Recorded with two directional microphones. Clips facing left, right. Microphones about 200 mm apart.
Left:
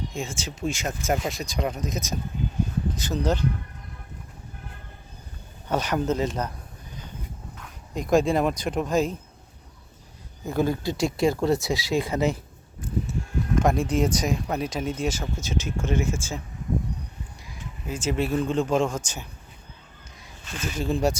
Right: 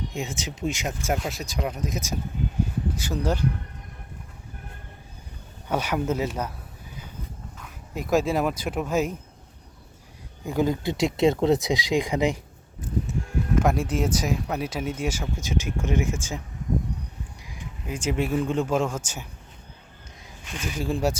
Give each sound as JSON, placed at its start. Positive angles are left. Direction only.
{"t": 0.1, "sound": "speech", "side_deg": -20}
{"t": 1.1, "sound": "speech", "side_deg": 0}
{"t": 5.6, "sound": "speech", "side_deg": -10}
{"t": 7.5, "sound": "speech", "side_deg": -5}
{"t": 10.4, "sound": "speech", "side_deg": -15}
{"t": 13.6, "sound": "speech", "side_deg": -5}
{"t": 17.4, "sound": "speech", "side_deg": -15}
{"t": 20.4, "sound": "speech", "side_deg": -15}